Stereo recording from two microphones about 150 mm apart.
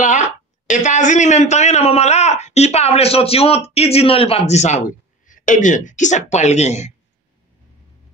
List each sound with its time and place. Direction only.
0.7 s a man's voice: 55° left (ahead or behind)